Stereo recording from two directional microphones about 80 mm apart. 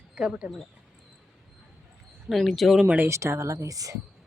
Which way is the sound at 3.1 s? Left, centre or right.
Right.